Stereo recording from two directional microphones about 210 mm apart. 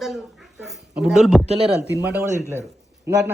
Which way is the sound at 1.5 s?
30° right (ahead or behind).